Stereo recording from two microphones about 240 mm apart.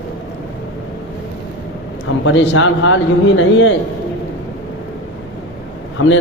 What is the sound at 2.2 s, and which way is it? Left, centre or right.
A man's voice, left.